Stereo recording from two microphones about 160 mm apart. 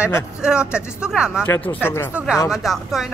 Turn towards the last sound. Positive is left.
turn(degrees=0)  # may be behind; listen again after turning